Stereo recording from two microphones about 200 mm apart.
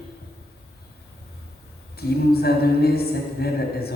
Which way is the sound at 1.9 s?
50° left (ahead or behind).